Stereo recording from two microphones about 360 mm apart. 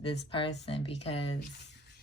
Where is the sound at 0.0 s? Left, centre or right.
Centre.